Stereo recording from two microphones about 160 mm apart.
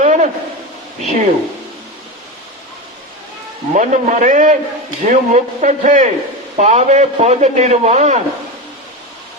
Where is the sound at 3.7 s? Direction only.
50° right (ahead or behind).